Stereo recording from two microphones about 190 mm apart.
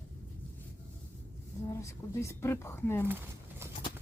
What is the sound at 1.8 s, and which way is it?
Speech, 15° left (ahead or behind).